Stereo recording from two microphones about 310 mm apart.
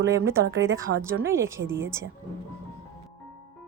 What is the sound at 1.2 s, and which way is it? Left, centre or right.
Speech, centre.